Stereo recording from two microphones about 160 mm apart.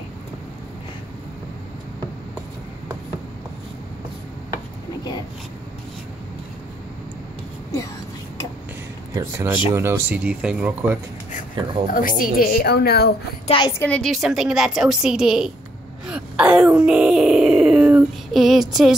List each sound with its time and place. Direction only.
9.1 s speech: 20° right (ahead or behind)
11.9 s a woman's voice: 60° left (ahead or behind); by 13.1 s 85° left
13.5 s a woman's voice: 30° left (ahead or behind)
13.7 s a woman's voice: 10° left (ahead or behind)
16.1 s wail: 5° right (ahead or behind)